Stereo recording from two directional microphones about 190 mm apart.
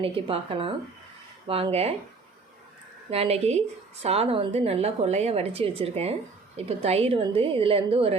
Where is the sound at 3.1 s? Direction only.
30° right (ahead or behind).